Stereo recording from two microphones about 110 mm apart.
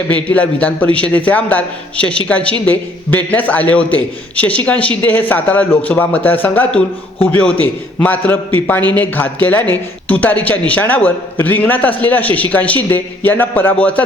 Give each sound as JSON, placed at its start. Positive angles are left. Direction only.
{"t": 0.1, "sound": "a woman's voice", "side_deg": 15}